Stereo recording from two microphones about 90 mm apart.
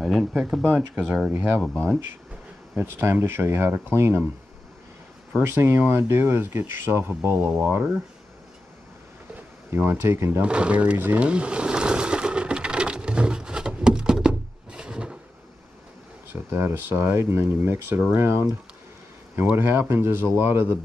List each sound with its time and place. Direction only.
0.0 s speech: 5° right (ahead or behind)
0.9 s speech: 15° right (ahead or behind)
2.8 s speech: 25° right (ahead or behind)
5.3 s speech: 25° right (ahead or behind)
9.3 s speech: 20° right (ahead or behind)
10.4 s a sound: 10° right (ahead or behind)
16.5 s speech: 25° right (ahead or behind)
19.5 s speech: 25° right (ahead or behind)